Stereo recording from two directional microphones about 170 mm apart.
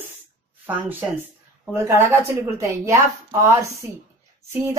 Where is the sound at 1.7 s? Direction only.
15° right (ahead or behind).